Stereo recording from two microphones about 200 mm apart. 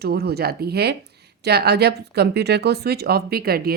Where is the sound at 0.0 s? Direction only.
50° right (ahead or behind).